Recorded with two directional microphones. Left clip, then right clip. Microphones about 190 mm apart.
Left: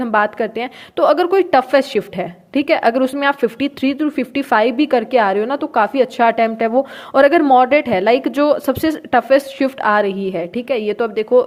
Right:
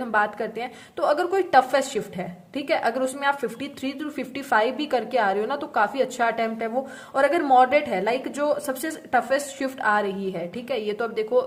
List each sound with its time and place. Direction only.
0.0 s a woman's voice: 40° left (ahead or behind)